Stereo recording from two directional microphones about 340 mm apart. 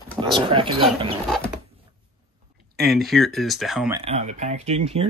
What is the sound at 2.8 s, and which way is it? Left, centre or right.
Speech, centre.